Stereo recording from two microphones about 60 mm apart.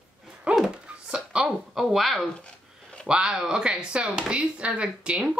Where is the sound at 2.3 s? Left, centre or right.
Centre.